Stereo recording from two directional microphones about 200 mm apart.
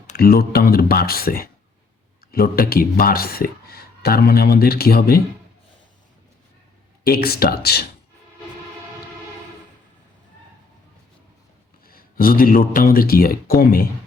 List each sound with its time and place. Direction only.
0.2 s speech: 50° left (ahead or behind)
7.0 s speech: 50° left (ahead or behind)
11.9 s speech: 45° left (ahead or behind)